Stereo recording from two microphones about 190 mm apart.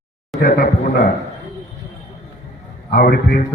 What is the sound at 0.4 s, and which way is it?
Speech, 50° left (ahead or behind).